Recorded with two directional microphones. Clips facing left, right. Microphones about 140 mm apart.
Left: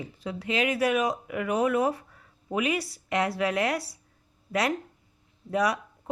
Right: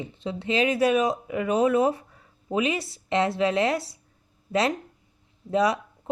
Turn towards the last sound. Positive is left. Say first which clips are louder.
# right 3 dB
turn(degrees=-25)  # may be behind; listen again after turning